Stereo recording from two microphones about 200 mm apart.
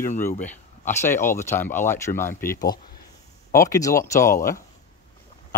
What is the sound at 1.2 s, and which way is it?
Speech, 10° left (ahead or behind).